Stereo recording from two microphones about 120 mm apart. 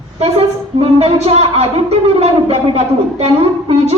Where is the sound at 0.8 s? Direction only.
60° right (ahead or behind).